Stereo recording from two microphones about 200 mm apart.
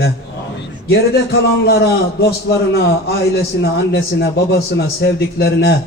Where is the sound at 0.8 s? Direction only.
55° left (ahead or behind).